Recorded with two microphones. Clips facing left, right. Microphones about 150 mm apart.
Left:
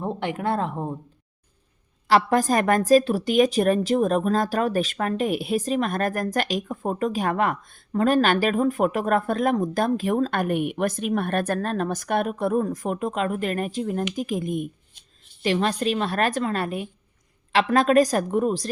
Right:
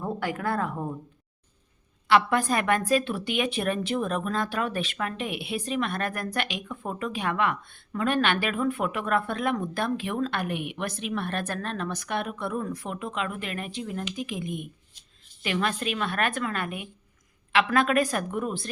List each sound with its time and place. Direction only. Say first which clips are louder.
0.0 s speech: left 3 dB; 25° left (ahead or behind)
2.0 s a woman's voice: left 3 dB; 40° left (ahead or behind)